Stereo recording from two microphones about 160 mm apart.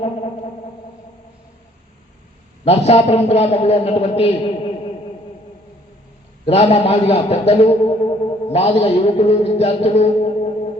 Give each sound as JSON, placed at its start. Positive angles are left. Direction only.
{"t": 2.6, "sound": "a man's voice", "side_deg": 40}
{"t": 6.4, "sound": "a man's voice", "side_deg": 40}